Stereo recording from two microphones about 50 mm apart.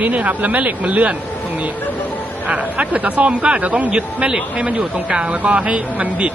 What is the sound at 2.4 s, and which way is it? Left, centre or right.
Speech, right.